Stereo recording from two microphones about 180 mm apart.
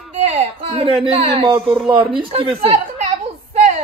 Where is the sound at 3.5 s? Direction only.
40° right (ahead or behind).